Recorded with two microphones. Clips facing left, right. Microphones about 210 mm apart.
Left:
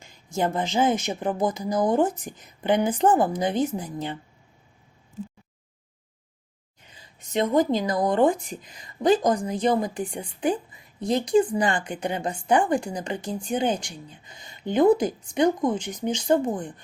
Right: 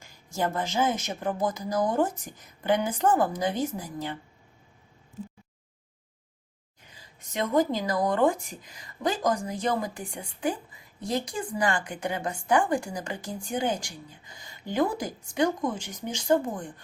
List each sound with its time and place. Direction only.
0.0 s speech: 20° left (ahead or behind)
6.9 s speech: 20° left (ahead or behind)